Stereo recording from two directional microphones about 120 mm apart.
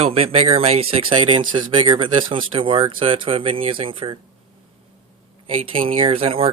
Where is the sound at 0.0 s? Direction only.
55° right (ahead or behind).